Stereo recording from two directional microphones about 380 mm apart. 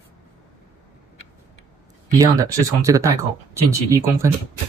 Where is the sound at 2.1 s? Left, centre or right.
Centre.